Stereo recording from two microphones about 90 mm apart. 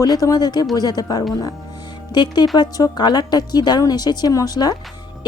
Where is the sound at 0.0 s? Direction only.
45° left (ahead or behind).